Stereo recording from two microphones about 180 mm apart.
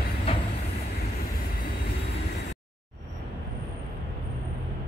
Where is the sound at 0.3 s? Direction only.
30° left (ahead or behind).